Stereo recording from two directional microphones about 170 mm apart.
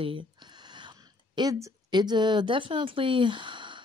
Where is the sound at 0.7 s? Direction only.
25° right (ahead or behind).